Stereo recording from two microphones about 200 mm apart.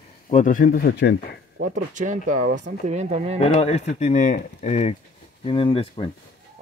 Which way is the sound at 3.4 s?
30° left (ahead or behind).